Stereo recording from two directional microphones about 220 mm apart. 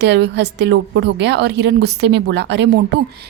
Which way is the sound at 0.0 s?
50° right (ahead or behind).